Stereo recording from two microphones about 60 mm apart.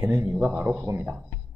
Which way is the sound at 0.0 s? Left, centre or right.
Right.